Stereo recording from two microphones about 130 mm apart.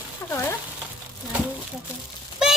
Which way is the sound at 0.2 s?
25° left (ahead or behind).